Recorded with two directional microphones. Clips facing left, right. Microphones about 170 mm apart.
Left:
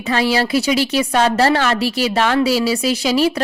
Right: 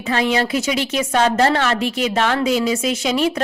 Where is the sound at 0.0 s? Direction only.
30° left (ahead or behind).